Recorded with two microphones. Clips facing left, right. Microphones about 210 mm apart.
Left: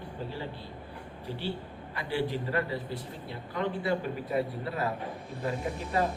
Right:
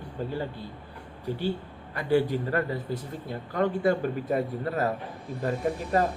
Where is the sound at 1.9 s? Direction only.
45° right (ahead or behind).